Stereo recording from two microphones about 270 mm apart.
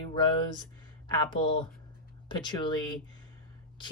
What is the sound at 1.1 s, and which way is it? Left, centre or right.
Speech, centre.